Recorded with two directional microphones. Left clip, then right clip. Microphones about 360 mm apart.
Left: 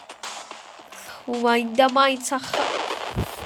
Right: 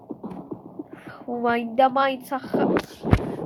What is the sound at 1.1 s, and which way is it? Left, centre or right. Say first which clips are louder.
A woman's voice: left 3 dB; centre.